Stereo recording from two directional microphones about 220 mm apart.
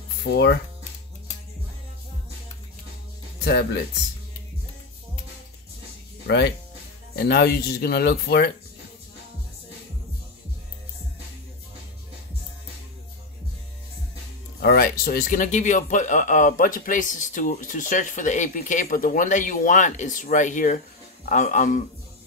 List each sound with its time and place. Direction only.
3.4 s speech: 50° left (ahead or behind)
6.2 s speech: 50° left (ahead or behind)
14.6 s speech: 45° left (ahead or behind)